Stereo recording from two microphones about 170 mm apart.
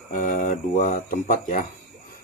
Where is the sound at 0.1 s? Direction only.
50° left (ahead or behind).